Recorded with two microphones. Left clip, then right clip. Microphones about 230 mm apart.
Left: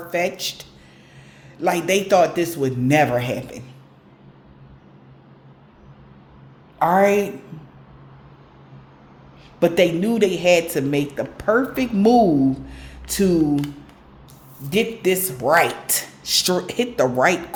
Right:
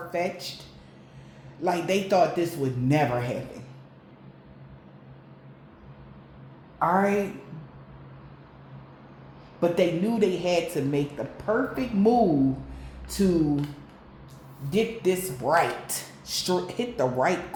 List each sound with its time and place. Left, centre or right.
0.1 s speech: left
1.6 s speech: left
6.7 s a woman's voice: left
9.6 s speech: left
14.7 s speech: left